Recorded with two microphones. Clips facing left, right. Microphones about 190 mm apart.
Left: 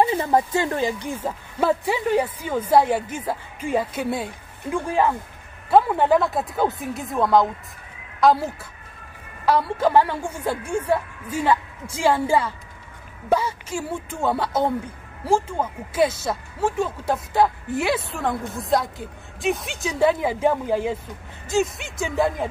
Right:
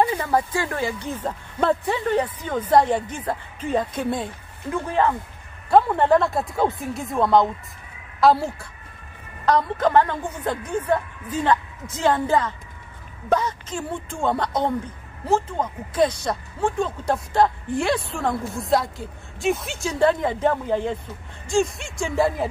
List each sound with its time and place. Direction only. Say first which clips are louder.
0.0 s a woman's voice: left 2 dB; 20° left (ahead or behind); by 22.5 s centre (ahead or behind)